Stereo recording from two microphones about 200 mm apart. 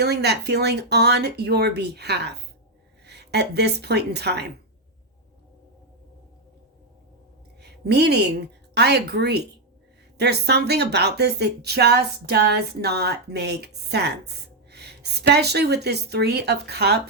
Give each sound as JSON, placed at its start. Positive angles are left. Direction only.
{"t": 0.0, "sound": "speech", "side_deg": -55}
{"t": 7.6, "sound": "a woman's voice", "side_deg": -55}